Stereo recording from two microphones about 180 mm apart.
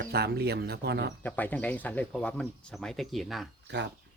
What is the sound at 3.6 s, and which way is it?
Speech, 75° right (ahead or behind).